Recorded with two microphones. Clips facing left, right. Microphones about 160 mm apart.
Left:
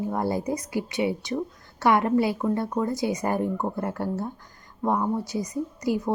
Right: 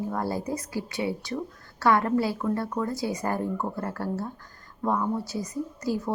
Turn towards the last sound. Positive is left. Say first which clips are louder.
# left 3 dB
turn(degrees=15)  # may be behind; listen again after turning